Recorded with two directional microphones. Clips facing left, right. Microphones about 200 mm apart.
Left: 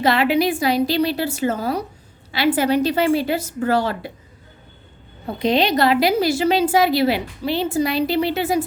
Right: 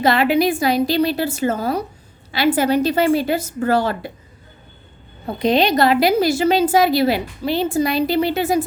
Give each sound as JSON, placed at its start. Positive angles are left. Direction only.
{"t": 0.0, "sound": "a woman's voice", "side_deg": -45}
{"t": 5.2, "sound": "a woman's voice", "side_deg": -45}